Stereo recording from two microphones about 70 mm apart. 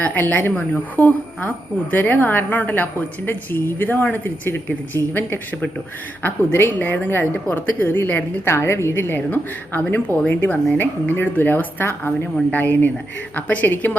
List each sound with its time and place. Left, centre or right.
0.0 s speech: left
8.4 s speech: left